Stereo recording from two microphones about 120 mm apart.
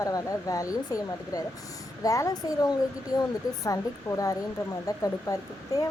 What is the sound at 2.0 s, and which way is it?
Speech, 30° left (ahead or behind).